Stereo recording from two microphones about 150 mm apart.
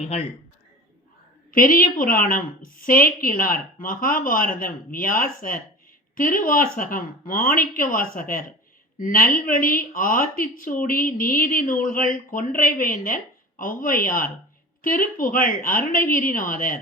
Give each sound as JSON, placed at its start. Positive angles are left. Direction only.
{"t": 0.0, "sound": "a man's voice", "side_deg": 45}
{"t": 1.5, "sound": "a woman's voice", "side_deg": 65}